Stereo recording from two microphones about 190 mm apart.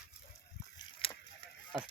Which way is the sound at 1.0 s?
30° left (ahead or behind).